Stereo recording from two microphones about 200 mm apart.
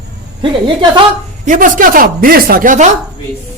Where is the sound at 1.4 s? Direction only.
40° right (ahead or behind).